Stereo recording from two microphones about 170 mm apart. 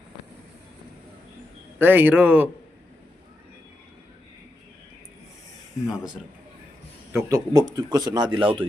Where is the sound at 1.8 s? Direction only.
10° right (ahead or behind).